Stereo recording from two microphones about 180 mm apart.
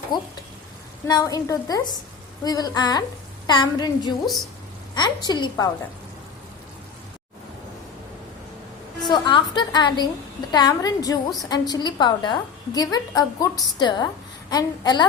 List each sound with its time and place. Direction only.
0.1 s a woman's voice: 25° left (ahead or behind)
9.0 s a woman's voice: 25° left (ahead or behind)